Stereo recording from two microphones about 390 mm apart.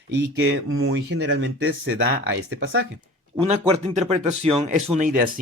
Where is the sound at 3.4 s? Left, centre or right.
Centre.